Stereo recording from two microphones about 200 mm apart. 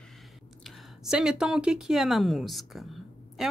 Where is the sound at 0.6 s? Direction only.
Centre (ahead or behind).